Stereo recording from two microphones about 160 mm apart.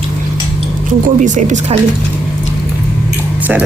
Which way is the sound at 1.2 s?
50° right (ahead or behind).